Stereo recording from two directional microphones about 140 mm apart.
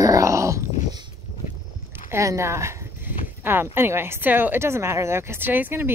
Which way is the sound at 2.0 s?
20° right (ahead or behind).